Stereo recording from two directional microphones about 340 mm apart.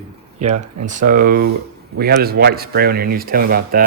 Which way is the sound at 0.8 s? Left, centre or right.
Right.